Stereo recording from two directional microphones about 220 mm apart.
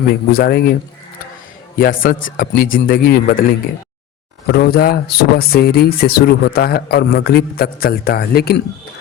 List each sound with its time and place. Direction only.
0.3 s speech: 45° left (ahead or behind)
1.8 s speech: 40° left (ahead or behind)
4.4 s speech: 45° left (ahead or behind)